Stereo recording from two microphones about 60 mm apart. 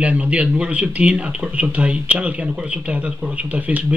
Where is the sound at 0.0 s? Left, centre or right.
Right.